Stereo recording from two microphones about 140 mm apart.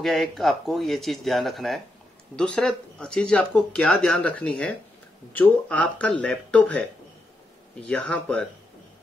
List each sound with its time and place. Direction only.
0.0 s speech: centre (ahead or behind)
7.9 s speech: 10° left (ahead or behind)